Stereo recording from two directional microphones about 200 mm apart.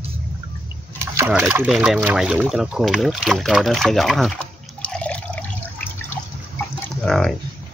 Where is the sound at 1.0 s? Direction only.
15° right (ahead or behind).